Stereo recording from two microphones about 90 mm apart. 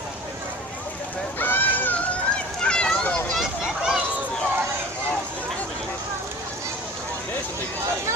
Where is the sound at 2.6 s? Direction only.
10° left (ahead or behind).